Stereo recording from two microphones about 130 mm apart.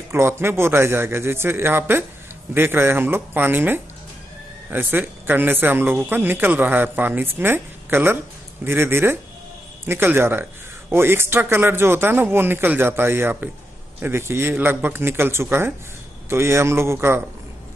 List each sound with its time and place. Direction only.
0.1 s a man's voice: 20° right (ahead or behind)